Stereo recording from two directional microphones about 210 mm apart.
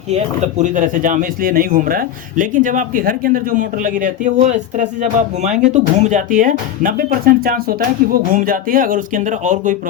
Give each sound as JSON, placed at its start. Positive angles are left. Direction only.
{"t": 0.6, "sound": "speech", "side_deg": -40}